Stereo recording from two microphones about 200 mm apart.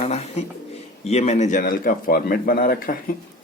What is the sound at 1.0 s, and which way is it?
A man's voice, 35° left (ahead or behind).